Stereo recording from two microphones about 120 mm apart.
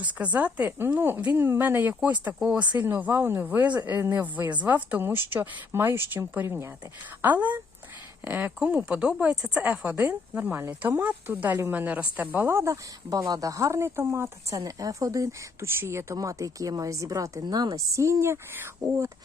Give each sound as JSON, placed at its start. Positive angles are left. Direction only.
{"t": 0.0, "sound": "a woman's voice", "side_deg": -10}